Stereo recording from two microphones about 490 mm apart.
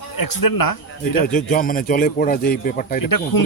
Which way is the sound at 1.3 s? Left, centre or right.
Centre.